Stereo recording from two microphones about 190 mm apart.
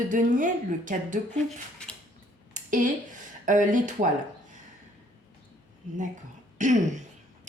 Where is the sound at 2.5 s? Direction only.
45° right (ahead or behind).